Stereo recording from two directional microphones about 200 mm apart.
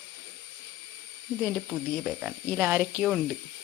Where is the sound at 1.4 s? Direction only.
5° right (ahead or behind).